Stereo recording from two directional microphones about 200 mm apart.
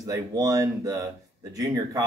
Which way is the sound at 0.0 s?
15° right (ahead or behind).